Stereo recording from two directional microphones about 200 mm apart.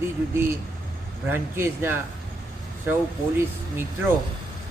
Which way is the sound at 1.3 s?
10° right (ahead or behind).